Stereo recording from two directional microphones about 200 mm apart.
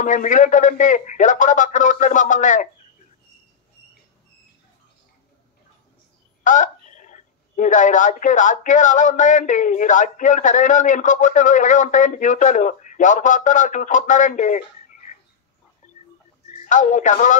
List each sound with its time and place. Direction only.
0.0 s speech: 40° left (ahead or behind)
6.4 s speech: 40° left (ahead or behind)
15.8 s music: 35° left (ahead or behind)
16.6 s speech: 40° left (ahead or behind)